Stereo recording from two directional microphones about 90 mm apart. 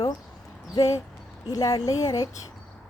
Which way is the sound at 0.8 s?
35° left (ahead or behind).